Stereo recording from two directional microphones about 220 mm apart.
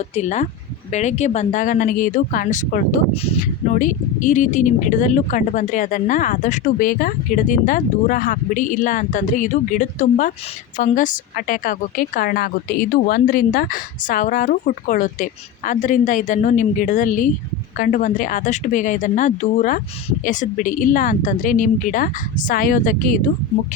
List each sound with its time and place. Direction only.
0.2 s speech: 35° left (ahead or behind)